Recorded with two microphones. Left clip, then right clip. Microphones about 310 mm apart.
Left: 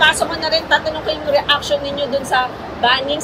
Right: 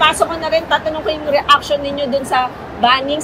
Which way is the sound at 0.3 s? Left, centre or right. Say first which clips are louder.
Even; centre.